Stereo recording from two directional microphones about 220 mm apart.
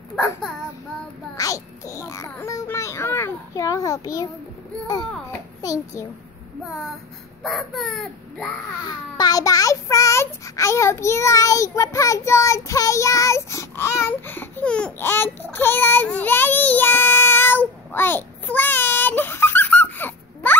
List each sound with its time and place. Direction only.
0.1 s child singing: 15° left (ahead or behind)
1.3 s a sound: 15° left (ahead or behind)
5.6 s a child's voice: 15° left (ahead or behind)
6.6 s speech: centre (ahead or behind)
8.8 s a child's voice: 20° left (ahead or behind)